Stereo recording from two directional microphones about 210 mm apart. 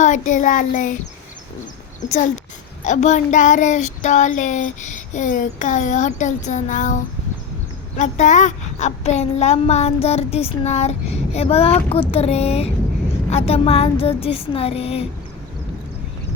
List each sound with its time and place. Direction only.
0.0 s child singing: 35° left (ahead or behind)
2.8 s child singing: 35° left (ahead or behind)
11.3 s speech: 30° left (ahead or behind)